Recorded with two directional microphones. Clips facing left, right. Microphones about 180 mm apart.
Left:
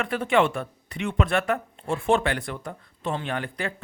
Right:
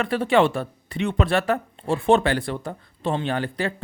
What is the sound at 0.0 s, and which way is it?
Speech, 35° right (ahead or behind).